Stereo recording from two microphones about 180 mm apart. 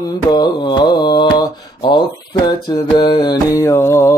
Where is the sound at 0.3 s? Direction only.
25° left (ahead or behind).